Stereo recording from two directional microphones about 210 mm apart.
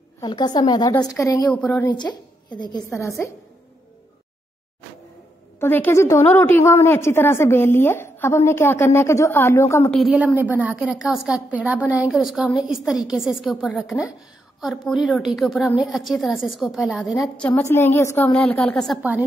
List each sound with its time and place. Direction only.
0.2 s a woman's voice: 20° left (ahead or behind)
1.9 s a woman's voice: 20° left (ahead or behind)
5.6 s a woman's voice: 10° left (ahead or behind)
9.9 s a woman's voice: 5° right (ahead or behind)